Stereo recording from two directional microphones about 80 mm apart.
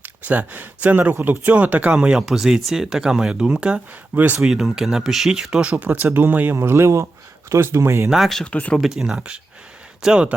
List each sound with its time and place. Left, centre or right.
0.0 s speech: right
4.1 s speech: right
4.4 s speech: centre
5.7 s speech: right
6.6 s speech: right
8.1 s speech: centre
8.4 s speech: centre
8.7 s speech: centre